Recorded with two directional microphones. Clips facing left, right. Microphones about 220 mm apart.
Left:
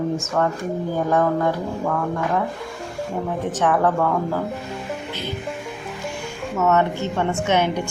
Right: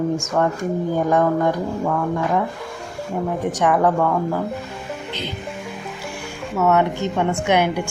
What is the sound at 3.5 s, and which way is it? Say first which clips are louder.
Speech: right 1 dB; 10° right (ahead or behind).